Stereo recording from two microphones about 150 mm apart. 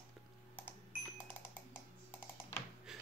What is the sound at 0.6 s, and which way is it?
Cash register, 10° left (ahead or behind).